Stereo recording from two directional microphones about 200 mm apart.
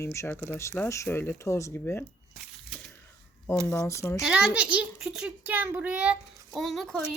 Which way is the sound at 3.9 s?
15° left (ahead or behind).